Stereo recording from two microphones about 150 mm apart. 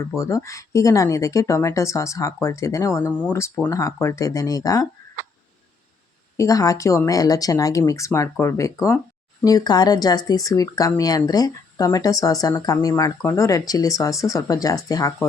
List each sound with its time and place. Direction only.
0.4 s speech: 20° left (ahead or behind)
6.3 s speech: 20° left (ahead or behind)